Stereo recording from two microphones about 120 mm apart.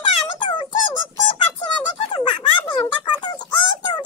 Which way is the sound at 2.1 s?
45° left (ahead or behind).